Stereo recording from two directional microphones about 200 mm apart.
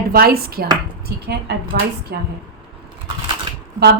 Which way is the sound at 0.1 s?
50° right (ahead or behind).